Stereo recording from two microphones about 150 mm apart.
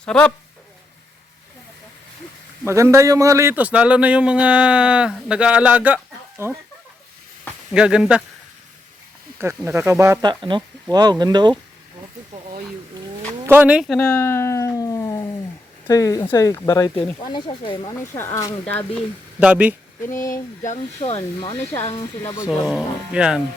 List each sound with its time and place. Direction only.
0.0 s speech: 5° left (ahead or behind)
2.6 s speech: 20° right (ahead or behind)
7.7 s speech: 5° right (ahead or behind)
9.6 s speech: 20° right (ahead or behind)
10.2 s speech: 30° right (ahead or behind)
12.3 s speech: 55° right (ahead or behind)
13.4 s speech: 15° right (ahead or behind)
13.8 s a sound: 5° left (ahead or behind)
15.9 s speech: 20° left (ahead or behind)
18.1 s speech: 15° left (ahead or behind)
18.9 s speech: 10° right (ahead or behind)
20.7 s speech: 45° left (ahead or behind)
21.5 s speech: 15° left (ahead or behind)
22.4 s speech: centre (ahead or behind)